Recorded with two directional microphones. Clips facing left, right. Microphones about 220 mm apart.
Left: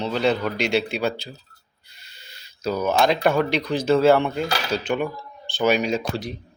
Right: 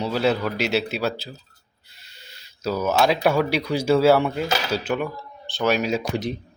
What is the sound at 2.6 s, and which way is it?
Speech, 5° right (ahead or behind).